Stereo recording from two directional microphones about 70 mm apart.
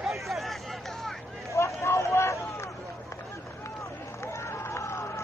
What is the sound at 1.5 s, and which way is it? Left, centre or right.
Vehicle, left.